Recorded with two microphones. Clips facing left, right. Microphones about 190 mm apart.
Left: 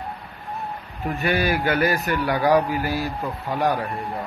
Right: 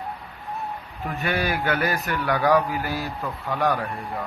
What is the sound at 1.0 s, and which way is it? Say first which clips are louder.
A man's voice: left 3 dB; 10° left (ahead or behind).